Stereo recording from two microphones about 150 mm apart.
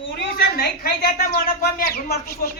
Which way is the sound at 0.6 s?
85° left.